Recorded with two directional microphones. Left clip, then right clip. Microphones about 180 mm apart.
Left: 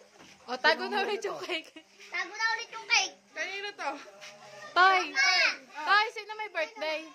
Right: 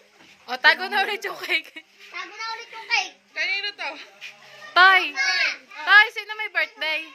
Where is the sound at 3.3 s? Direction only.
55° left (ahead or behind).